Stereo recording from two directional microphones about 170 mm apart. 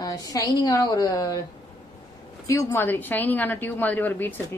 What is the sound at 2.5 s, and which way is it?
A woman's voice, 15° left (ahead or behind).